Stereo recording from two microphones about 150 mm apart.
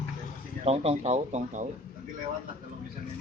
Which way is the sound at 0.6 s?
45° right (ahead or behind).